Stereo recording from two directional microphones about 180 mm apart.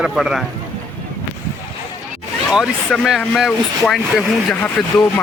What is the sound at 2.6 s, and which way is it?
Speech, centre (ahead or behind).